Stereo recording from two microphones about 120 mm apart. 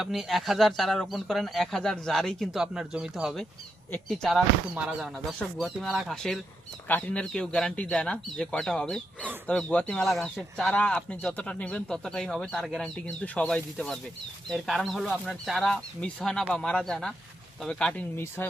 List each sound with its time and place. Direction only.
0.0 s speech: centre (ahead or behind)
4.7 s speech: 10° right (ahead or behind)
6.8 s speech: 10° left (ahead or behind)